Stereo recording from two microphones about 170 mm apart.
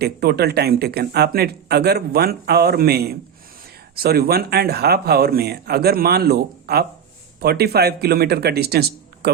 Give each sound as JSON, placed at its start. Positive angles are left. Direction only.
{"t": 0.0, "sound": "speech", "side_deg": -70}